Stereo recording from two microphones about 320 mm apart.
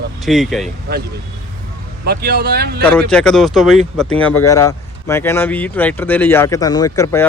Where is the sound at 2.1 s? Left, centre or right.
Right.